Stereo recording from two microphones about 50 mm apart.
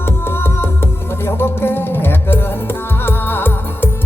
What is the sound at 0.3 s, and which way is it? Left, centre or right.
Music, left.